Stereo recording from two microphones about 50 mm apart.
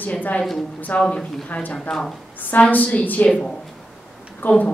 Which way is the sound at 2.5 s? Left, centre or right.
Left.